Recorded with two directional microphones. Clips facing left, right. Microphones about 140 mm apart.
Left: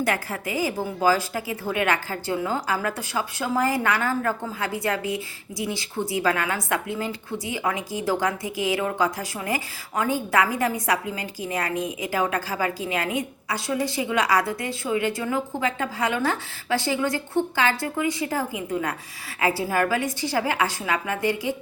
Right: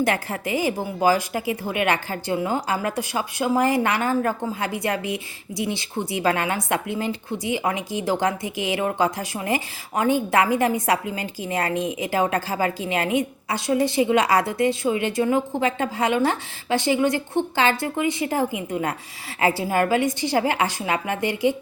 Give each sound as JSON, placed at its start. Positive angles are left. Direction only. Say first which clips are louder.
{"t": 0.0, "sound": "a woman's voice", "louder": "right 3 dB", "side_deg": -25}